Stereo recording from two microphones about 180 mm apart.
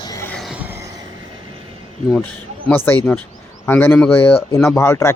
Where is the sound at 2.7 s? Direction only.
10° left (ahead or behind).